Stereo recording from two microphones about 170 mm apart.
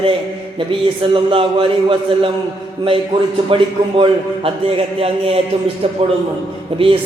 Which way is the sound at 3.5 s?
30° right (ahead or behind).